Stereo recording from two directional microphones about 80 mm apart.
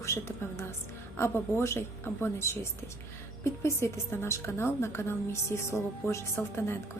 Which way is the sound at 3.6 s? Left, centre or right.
Left.